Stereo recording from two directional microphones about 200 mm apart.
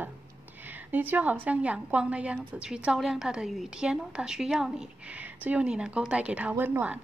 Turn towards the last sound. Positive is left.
turn(degrees=-10)  # may be behind; listen again after turning